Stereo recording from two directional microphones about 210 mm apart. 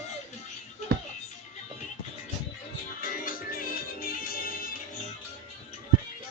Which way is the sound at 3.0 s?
40° left (ahead or behind).